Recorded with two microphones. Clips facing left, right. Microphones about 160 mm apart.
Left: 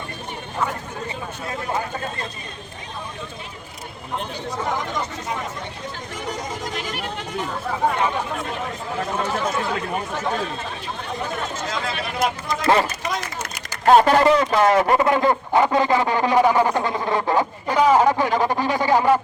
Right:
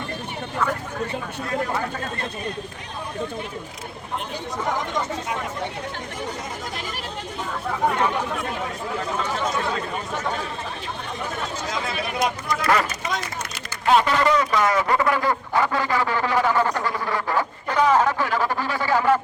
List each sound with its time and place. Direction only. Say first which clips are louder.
12.5 s a sound: left 4 dB; 25° left (ahead or behind)
13.8 s speech: left 5 dB; 45° left (ahead or behind)
14.3 s speech: left 4 dB; 30° left (ahead or behind)
17.7 s speech: left 3 dB; 10° left (ahead or behind)